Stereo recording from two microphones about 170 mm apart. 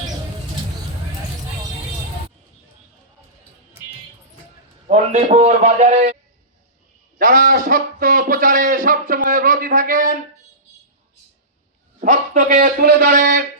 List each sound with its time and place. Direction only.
4.9 s a man's voice: 40° right (ahead or behind)
7.2 s a man's voice: 55° right (ahead or behind)
11.9 s a man's voice: 45° right (ahead or behind)